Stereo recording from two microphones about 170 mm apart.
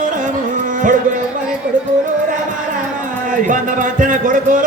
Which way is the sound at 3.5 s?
50° right (ahead or behind).